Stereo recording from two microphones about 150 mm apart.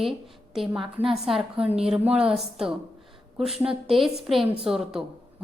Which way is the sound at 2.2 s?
5° right (ahead or behind).